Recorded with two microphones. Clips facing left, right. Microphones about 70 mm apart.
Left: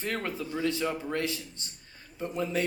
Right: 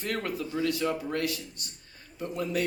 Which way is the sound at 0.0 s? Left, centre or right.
Left.